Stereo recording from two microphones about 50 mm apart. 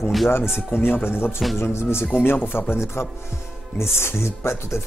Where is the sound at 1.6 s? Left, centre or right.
Left.